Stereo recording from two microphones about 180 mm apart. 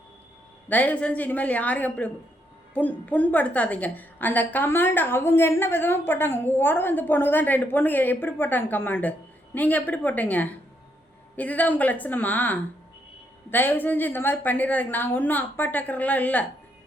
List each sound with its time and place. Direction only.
0.7 s a woman's voice: 10° left (ahead or behind)